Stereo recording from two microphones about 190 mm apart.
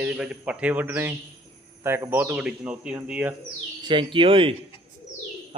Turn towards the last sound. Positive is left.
turn(degrees=-30)  # may be behind; listen again after turning